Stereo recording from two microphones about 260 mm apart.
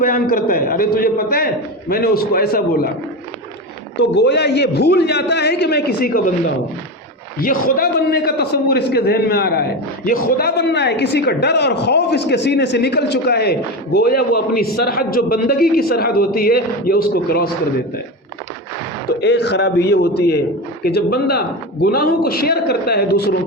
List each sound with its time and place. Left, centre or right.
0.0 s a man's voice: left
3.9 s a man's voice: left
7.3 s a man's voice: left
19.2 s a man's voice: left